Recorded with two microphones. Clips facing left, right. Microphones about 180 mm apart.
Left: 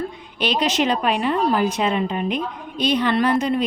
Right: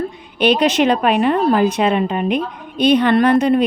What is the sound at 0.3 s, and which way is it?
Speech, 60° right (ahead or behind).